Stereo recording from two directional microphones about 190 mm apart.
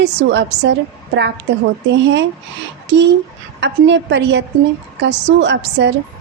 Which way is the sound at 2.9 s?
65° right (ahead or behind).